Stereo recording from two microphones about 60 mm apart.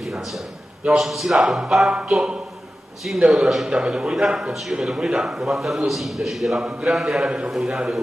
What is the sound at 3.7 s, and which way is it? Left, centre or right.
A man's voice, centre.